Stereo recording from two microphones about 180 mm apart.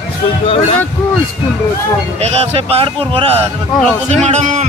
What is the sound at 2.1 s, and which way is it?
Speech, 35° right (ahead or behind).